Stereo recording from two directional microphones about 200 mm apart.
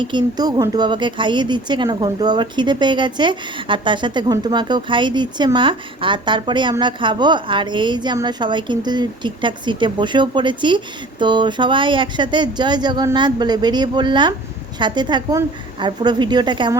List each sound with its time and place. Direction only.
0.0 s speech: 25° right (ahead or behind)